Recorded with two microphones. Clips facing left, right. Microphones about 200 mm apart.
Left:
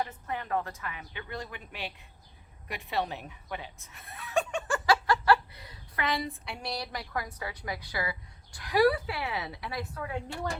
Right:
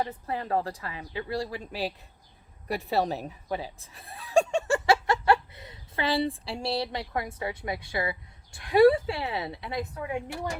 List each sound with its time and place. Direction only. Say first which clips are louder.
0.0 s a woman's voice: right 3 dB; 30° right (ahead or behind); by 10.6 s 15° right (ahead or behind)